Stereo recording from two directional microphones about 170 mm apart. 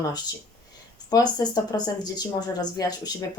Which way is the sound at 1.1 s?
25° left (ahead or behind).